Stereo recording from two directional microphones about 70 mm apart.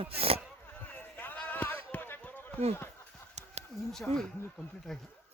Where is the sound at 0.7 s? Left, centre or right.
Left.